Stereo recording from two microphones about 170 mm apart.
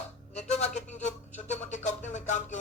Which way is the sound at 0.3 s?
40° left (ahead or behind).